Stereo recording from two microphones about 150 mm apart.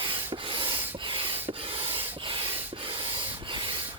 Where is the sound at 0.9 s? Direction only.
35° right (ahead or behind).